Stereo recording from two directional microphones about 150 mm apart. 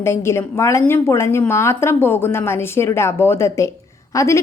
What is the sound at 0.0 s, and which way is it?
A woman's voice, 15° left (ahead or behind).